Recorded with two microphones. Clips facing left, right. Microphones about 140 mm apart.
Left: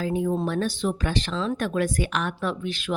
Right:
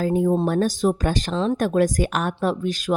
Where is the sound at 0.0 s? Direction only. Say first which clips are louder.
Right 5 dB; 40° right (ahead or behind).